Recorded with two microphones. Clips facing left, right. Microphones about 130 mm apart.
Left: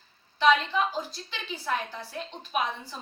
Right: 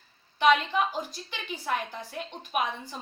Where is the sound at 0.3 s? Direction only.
15° right (ahead or behind).